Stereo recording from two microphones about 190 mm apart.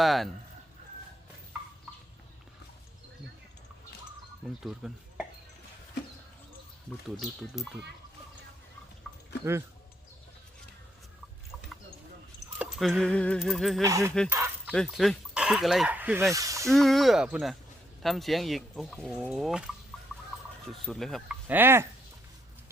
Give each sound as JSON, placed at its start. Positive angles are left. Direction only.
{"t": 0.0, "sound": "speech", "side_deg": 0}
{"t": 4.4, "sound": "speech", "side_deg": 0}
{"t": 7.2, "sound": "speech", "side_deg": 0}
{"t": 9.4, "sound": "speech", "side_deg": -15}
{"t": 12.5, "sound": "speech", "side_deg": 0}
{"t": 13.8, "sound": "speech", "side_deg": -15}
{"t": 14.7, "sound": "speech", "side_deg": 0}
{"t": 16.6, "sound": "speech", "side_deg": 0}
{"t": 21.4, "sound": "speech", "side_deg": -10}